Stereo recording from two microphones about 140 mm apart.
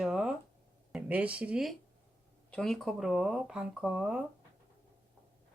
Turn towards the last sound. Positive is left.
turn(degrees=-5)  # may be behind; listen again after turning